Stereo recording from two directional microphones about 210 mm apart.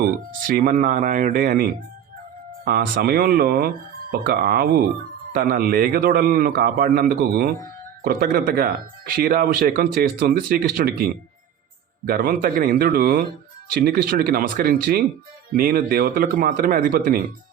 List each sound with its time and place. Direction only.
0.0 s speech: 45° right (ahead or behind)